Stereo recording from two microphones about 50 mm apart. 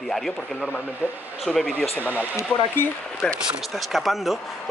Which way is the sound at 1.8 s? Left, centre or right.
Left.